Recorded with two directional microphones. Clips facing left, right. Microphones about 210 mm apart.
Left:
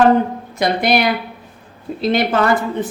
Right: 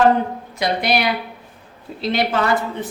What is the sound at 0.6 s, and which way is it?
A woman's voice, 50° left (ahead or behind).